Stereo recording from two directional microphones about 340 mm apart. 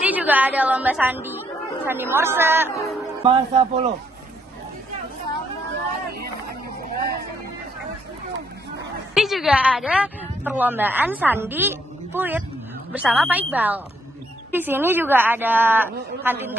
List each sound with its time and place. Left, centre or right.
0.0 s a woman's voice: centre
2.7 s speech: centre
3.3 s speech: centre
9.1 s a woman's voice: centre